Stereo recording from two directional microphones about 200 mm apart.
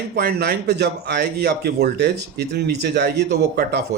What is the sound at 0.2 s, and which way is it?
Speech, 50° right (ahead or behind).